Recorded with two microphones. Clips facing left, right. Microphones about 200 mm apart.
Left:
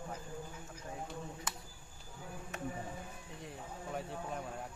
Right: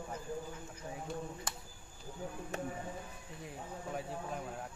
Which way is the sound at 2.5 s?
30° right (ahead or behind).